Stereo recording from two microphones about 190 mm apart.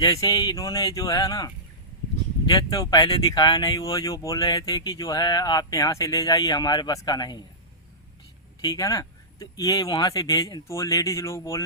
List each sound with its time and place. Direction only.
0.0 s speech: 20° left (ahead or behind)
8.6 s speech: 20° left (ahead or behind)